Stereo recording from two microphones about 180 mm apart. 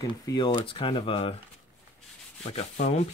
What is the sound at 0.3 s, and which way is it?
Speech, 25° left (ahead or behind).